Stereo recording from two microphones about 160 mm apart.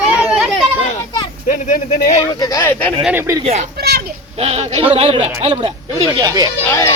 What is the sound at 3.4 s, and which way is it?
Speech, 40° right (ahead or behind).